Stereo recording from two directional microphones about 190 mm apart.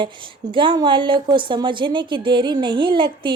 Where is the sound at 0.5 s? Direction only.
25° right (ahead or behind).